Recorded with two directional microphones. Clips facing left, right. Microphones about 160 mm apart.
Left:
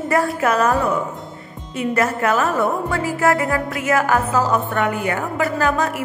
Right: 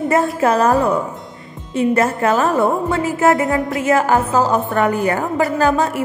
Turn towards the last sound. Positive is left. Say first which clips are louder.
# right 4 dB
turn(degrees=-30)  # may be behind; listen again after turning